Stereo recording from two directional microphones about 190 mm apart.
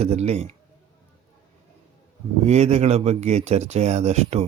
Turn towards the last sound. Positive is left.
turn(degrees=-35)  # may be behind; listen again after turning